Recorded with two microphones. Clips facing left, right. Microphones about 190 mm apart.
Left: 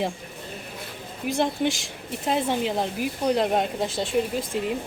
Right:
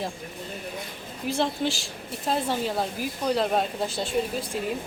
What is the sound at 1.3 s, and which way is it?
Speech, 15° left (ahead or behind).